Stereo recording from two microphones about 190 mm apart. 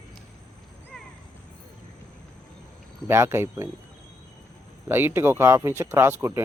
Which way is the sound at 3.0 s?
15° right (ahead or behind).